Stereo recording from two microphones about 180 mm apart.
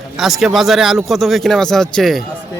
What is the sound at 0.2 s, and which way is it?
Speech, centre (ahead or behind).